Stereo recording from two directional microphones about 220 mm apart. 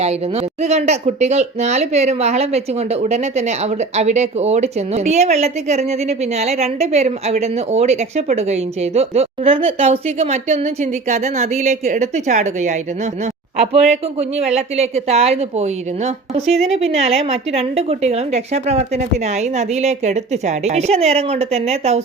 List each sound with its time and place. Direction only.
0.0 s speech: 30° right (ahead or behind)
13.9 s speech: 30° right (ahead or behind)